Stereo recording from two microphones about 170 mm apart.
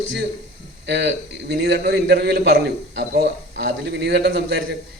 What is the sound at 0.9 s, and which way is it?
A man's voice, 75° right (ahead or behind).